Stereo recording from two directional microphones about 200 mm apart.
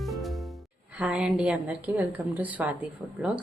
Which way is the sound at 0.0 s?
Centre (ahead or behind).